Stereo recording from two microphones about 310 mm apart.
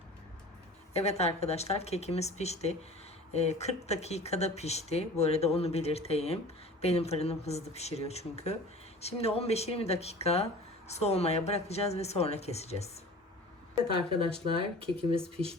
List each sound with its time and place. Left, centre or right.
0.9 s speech: centre
13.8 s speech: centre